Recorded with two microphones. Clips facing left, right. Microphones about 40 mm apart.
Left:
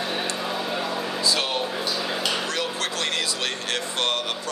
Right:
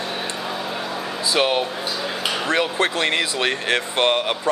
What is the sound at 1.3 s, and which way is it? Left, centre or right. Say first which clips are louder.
Speech: right 5 dB; right.